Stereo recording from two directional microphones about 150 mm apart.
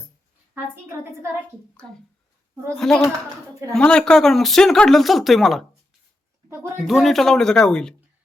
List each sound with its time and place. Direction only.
0.5 s a woman's voice: 15° right (ahead or behind)
2.7 s speech: 5° left (ahead or behind)
6.8 s speech: centre (ahead or behind)